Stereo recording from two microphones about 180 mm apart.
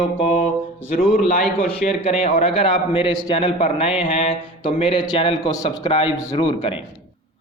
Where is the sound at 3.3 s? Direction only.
35° left (ahead or behind).